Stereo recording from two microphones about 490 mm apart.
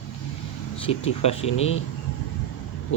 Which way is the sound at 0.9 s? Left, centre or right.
Centre.